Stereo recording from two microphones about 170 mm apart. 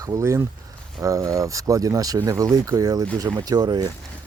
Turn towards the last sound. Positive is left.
turn(degrees=-25)  # may be behind; listen again after turning